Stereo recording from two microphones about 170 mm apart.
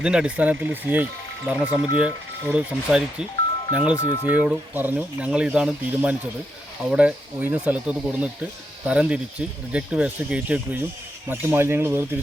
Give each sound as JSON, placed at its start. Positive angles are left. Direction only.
{"t": 0.0, "sound": "speech", "side_deg": -5}
{"t": 3.9, "sound": "speech", "side_deg": 15}
{"t": 4.3, "sound": "speech", "side_deg": -10}